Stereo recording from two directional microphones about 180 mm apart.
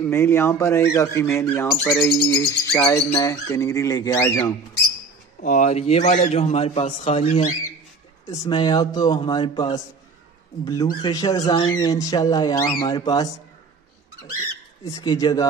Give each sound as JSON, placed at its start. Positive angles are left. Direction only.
{"t": 0.1, "sound": "speech", "side_deg": 15}
{"t": 5.4, "sound": "a man's voice", "side_deg": 45}
{"t": 8.3, "sound": "speech", "side_deg": 25}
{"t": 14.9, "sound": "speech", "side_deg": 20}